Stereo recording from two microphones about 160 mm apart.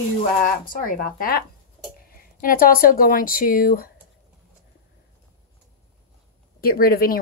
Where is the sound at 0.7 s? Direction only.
60° left (ahead or behind).